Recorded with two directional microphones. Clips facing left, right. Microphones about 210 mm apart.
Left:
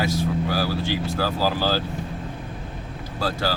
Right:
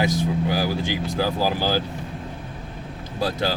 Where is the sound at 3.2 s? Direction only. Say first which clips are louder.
Right 2 dB; 20° right (ahead or behind).